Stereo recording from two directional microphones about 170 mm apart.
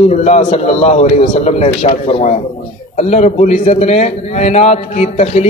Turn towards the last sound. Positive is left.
turn(degrees=40)  # may be behind; listen again after turning